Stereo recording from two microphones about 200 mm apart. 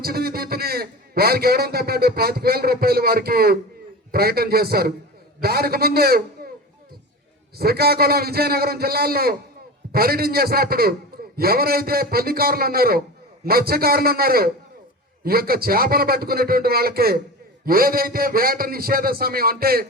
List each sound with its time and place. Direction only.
0.0 s a man's voice: 50° right (ahead or behind)
7.6 s a man's voice: 50° right (ahead or behind)